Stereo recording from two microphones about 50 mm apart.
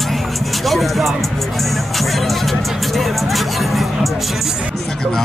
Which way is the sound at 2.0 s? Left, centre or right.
Centre.